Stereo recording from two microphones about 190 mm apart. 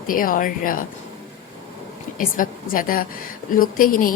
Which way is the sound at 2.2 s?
45° left (ahead or behind).